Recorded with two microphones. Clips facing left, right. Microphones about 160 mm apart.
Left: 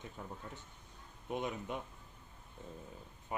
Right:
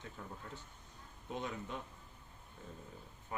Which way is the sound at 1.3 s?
15° left (ahead or behind).